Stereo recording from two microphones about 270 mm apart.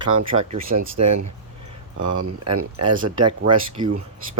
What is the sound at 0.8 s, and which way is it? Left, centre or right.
Speech, right.